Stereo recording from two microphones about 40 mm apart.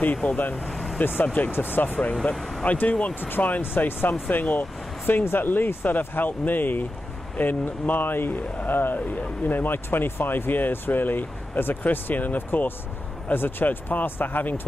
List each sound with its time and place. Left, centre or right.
0.4 s speech: left
0.7 s vehicle: centre
1.2 s speech: left
1.5 s speech: left
2.3 s speech: centre
2.6 s speech: left
3.2 s speech: left
3.6 s speech: left
4.1 s speech: left
5.2 s speech: left
5.9 s speech: left
9.8 s speech: left